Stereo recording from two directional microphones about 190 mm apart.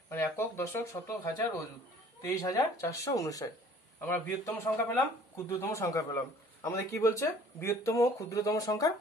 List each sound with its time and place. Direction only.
0.1 s a man's voice: 15° left (ahead or behind)